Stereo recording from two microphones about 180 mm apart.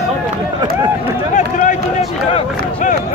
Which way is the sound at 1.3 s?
45° left (ahead or behind).